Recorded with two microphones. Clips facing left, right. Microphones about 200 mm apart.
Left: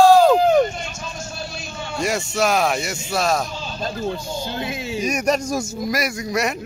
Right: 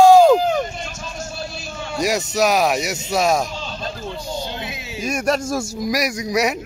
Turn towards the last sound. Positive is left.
turn(degrees=0)  # may be behind; listen again after turning